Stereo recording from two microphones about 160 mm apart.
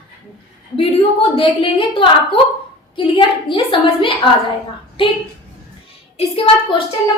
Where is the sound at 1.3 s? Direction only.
35° left (ahead or behind).